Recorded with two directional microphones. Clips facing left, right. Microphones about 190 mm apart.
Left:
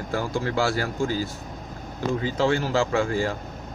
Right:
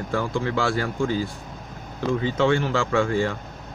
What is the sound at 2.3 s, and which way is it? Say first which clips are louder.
Speech: right 2 dB; 35° left (ahead or behind).